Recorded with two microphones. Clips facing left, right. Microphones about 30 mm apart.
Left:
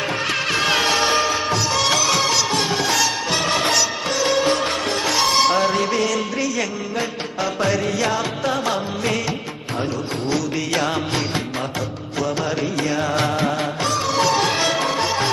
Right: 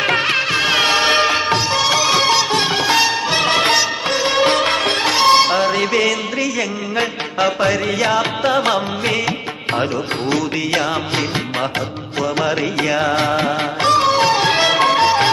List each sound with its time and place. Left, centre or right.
0.5 s music: centre
0.8 s music: right
1.0 s music: right
2.0 s music: right
3.8 s music: right
4.4 s music: right
5.1 s music: right
6.1 s music: centre
8.2 s music: right
12.9 s music: right
13.8 s music: right
14.2 s music: right
14.7 s music: right